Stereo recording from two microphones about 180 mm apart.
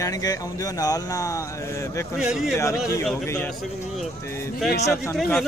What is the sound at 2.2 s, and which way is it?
Speech, 5° right (ahead or behind).